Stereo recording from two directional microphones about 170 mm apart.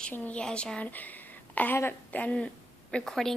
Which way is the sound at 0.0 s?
10° left (ahead or behind).